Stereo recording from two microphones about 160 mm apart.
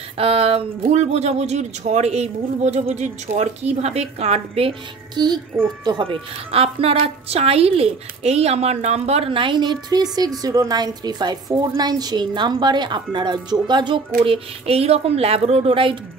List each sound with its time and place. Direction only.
0.2 s a woman's voice: 35° right (ahead or behind)